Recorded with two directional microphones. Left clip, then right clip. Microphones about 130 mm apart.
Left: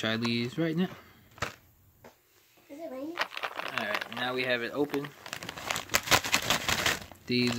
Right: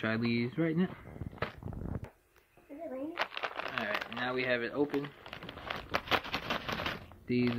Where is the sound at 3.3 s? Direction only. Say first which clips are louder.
Left 2 dB; 55° left (ahead or behind).